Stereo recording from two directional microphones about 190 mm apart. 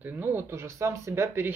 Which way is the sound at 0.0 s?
10° right (ahead or behind).